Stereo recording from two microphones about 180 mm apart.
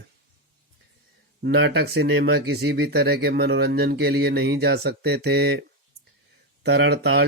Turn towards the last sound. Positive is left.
turn(degrees=-65)  # may be behind; listen again after turning